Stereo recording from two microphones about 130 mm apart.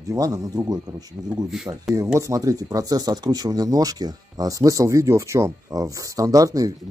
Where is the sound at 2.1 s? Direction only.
25° right (ahead or behind).